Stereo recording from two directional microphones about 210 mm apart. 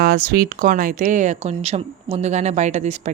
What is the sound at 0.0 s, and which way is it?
A woman's voice, 45° right (ahead or behind).